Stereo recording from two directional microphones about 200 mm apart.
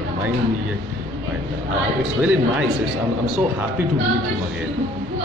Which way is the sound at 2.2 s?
5° right (ahead or behind).